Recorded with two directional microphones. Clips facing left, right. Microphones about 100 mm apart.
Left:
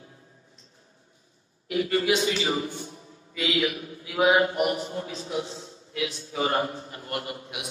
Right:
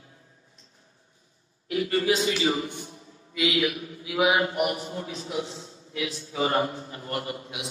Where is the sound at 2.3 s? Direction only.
25° left (ahead or behind).